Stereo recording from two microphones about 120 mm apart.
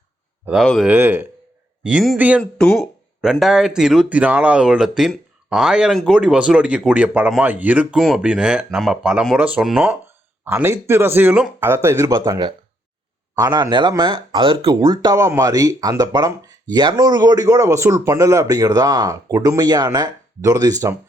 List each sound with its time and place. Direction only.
0.4 s speech: 5° right (ahead or behind)
0.9 s speech: 15° right (ahead or behind)
2.4 s speech: 5° left (ahead or behind); by 7.9 s 10° right (ahead or behind)
7.9 s speech: centre (ahead or behind); by 12.1 s 20° right (ahead or behind)
12.1 s speech: 30° right (ahead or behind)